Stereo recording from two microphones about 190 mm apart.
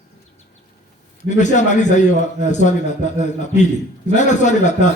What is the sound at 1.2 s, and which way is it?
Speech, 40° left (ahead or behind).